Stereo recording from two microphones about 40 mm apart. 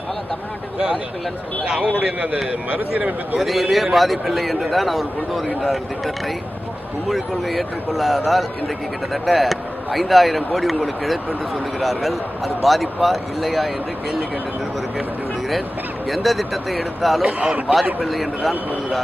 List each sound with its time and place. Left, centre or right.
2.5 s speech: right
3.3 s speech: centre
7.1 s speech: centre
16.0 s speech: centre
17.2 s a man's voice: centre
18.0 s speech: centre